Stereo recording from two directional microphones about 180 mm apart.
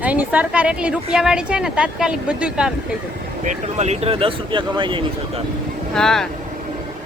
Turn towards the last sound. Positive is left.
turn(degrees=5)  # may be behind; listen again after turning